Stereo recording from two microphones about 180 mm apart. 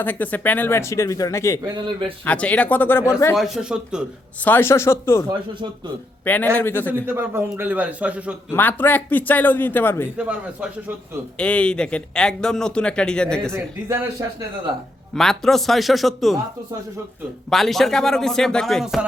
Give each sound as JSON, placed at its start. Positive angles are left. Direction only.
{"t": 0.0, "sound": "a man's voice", "side_deg": 10}
{"t": 1.6, "sound": "a man's voice", "side_deg": -25}
{"t": 2.2, "sound": "a man's voice", "side_deg": 10}
{"t": 3.3, "sound": "a man's voice", "side_deg": 0}
{"t": 4.4, "sound": "a man's voice", "side_deg": 10}
{"t": 6.2, "sound": "a man's voice", "side_deg": 10}
{"t": 7.1, "sound": "a man's voice", "side_deg": -10}
{"t": 8.4, "sound": "a man's voice", "side_deg": 10}
{"t": 10.2, "sound": "a man's voice", "side_deg": -5}
{"t": 11.3, "sound": "a man's voice", "side_deg": 5}
{"t": 13.4, "sound": "a man's voice", "side_deg": -15}
{"t": 15.1, "sound": "a man's voice", "side_deg": 0}
{"t": 17.5, "sound": "a man's voice", "side_deg": 0}